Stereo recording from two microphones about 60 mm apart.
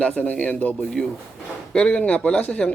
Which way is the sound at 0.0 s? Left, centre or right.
Centre.